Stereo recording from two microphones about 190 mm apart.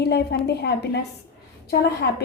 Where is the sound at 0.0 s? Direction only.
60° left (ahead or behind).